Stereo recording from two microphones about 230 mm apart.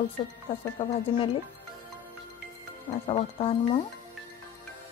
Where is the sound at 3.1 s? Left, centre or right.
Left.